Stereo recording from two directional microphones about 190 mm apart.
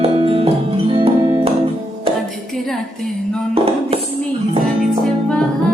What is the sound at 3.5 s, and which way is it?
Music, 30° right (ahead or behind).